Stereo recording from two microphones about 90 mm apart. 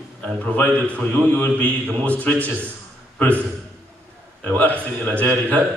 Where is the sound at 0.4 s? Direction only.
15° left (ahead or behind).